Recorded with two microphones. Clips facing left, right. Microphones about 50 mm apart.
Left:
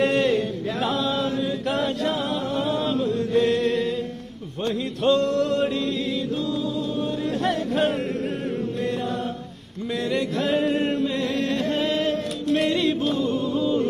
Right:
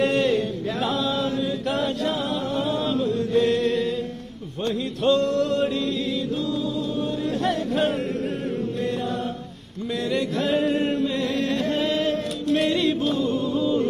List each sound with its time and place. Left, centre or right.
0.0 s chant: left
4.6 s music: left
7.4 s music: left
10.1 s chant: left
11.5 s music: left